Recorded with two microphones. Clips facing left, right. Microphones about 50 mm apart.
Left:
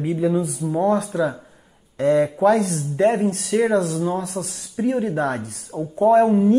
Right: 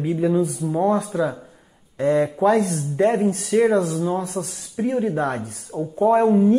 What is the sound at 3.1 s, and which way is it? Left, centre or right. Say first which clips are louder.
Speech: right 1 dB; left.